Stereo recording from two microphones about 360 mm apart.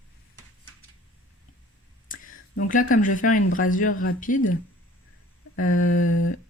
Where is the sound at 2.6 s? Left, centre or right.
Left.